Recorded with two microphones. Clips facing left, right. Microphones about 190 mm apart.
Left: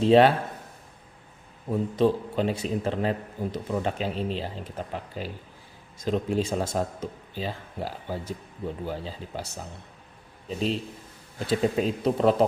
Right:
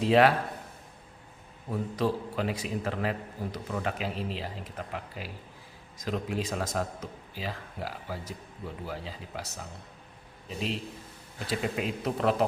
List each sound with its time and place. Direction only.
0.0 s a man's voice: 25° left (ahead or behind)
1.7 s a man's voice: 25° left (ahead or behind)
11.4 s speech: 35° left (ahead or behind)